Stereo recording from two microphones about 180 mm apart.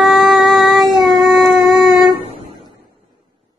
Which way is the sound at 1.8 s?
Centre (ahead or behind).